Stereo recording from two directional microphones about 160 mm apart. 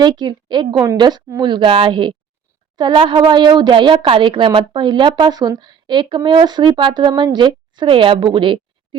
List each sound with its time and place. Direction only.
0.0 s a woman's voice: 30° right (ahead or behind)